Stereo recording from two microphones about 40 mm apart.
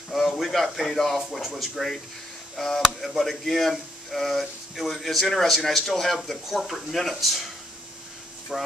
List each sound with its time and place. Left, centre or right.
0.1 s speech: centre
8.5 s speech: centre